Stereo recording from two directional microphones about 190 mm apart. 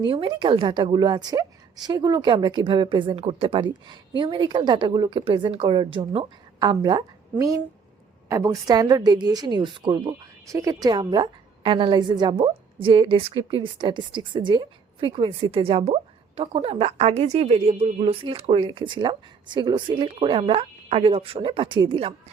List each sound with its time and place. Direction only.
0.0 s a woman's voice: 25° right (ahead or behind)